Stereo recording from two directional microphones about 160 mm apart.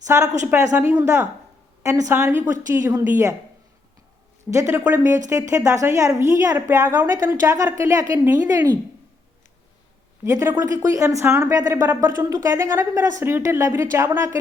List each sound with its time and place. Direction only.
0.0 s a woman's voice: 20° right (ahead or behind)
4.5 s a woman's voice: 15° right (ahead or behind)
10.2 s a woman's voice: 20° right (ahead or behind)